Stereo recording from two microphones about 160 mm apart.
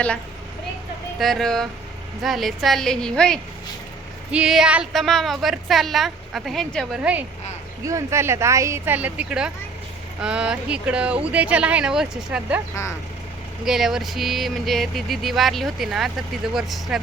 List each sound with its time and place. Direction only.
1.2 s a woman's voice: centre (ahead or behind)
7.0 s speech: 10° right (ahead or behind)
13.7 s a woman's voice: centre (ahead or behind)